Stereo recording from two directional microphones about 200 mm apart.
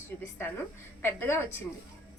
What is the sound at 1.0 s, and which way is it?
Speech, 10° left (ahead or behind).